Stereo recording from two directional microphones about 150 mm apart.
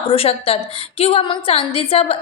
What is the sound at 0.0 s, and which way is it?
A woman's voice, 40° left (ahead or behind).